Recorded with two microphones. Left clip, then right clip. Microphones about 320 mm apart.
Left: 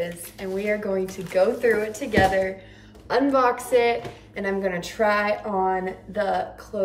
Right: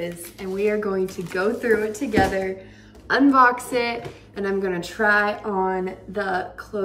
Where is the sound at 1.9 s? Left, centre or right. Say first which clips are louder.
Right 1 dB; right.